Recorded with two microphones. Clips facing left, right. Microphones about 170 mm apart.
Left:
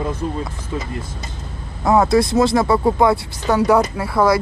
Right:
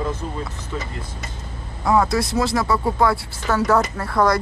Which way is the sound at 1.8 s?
25° left (ahead or behind).